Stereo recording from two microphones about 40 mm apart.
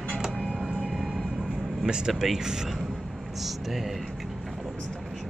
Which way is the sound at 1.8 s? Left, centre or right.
Right.